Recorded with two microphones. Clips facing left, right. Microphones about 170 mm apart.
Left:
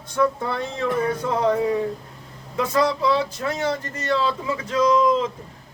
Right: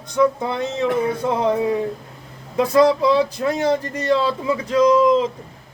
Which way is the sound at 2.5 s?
35° right (ahead or behind).